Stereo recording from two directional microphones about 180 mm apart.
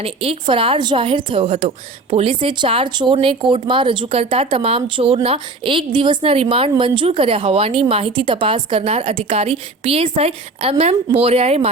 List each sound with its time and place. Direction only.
0.0 s a woman's voice: 30° right (ahead or behind)